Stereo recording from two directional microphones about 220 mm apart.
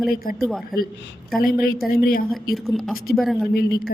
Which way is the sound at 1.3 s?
40° left (ahead or behind).